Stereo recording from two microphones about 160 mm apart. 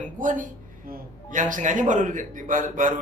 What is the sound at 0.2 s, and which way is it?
Speech, 55° right (ahead or behind).